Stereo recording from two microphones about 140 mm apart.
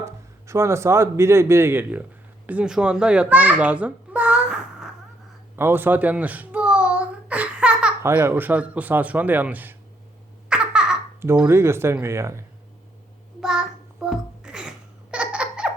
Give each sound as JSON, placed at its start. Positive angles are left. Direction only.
{"t": 0.0, "sound": "a man's voice", "side_deg": -20}
{"t": 5.5, "sound": "babbling", "side_deg": -15}
{"t": 8.0, "sound": "speech", "side_deg": -15}
{"t": 10.5, "sound": "baby laughter", "side_deg": -5}
{"t": 11.2, "sound": "speech", "side_deg": -15}
{"t": 13.4, "sound": "babbling", "side_deg": -5}